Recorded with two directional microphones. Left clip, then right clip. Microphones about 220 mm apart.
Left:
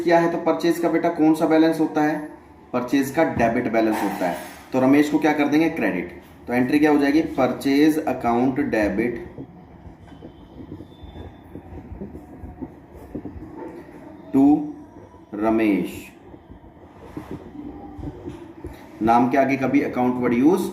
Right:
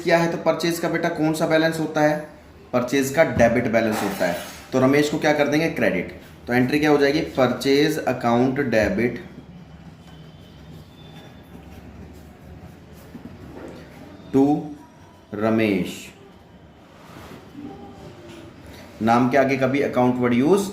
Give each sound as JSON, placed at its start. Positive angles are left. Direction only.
{"t": 0.0, "sound": "speech", "side_deg": -45}
{"t": 15.4, "sound": "speech", "side_deg": -50}
{"t": 19.0, "sound": "speech", "side_deg": -40}